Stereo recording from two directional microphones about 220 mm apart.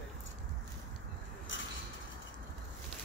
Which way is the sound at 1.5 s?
60° left (ahead or behind).